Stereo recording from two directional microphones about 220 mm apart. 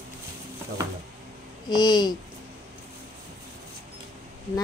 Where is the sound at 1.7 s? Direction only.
20° left (ahead or behind).